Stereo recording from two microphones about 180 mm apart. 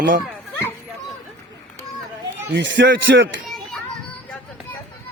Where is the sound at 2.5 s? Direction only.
85° right.